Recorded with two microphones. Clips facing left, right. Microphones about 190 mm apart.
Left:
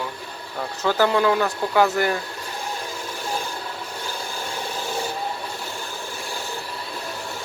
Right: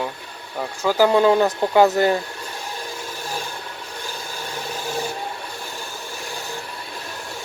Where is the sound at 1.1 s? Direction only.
20° right (ahead or behind).